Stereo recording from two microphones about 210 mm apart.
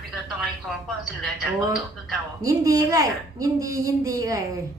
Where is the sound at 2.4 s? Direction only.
15° right (ahead or behind).